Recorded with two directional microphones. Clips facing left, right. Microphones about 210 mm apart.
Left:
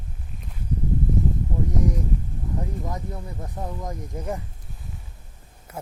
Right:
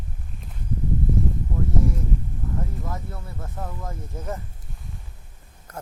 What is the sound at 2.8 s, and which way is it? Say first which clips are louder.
Speech: left 2 dB; 15° left (ahead or behind).